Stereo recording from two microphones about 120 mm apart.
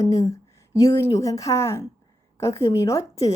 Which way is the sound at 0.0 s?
30° left (ahead or behind).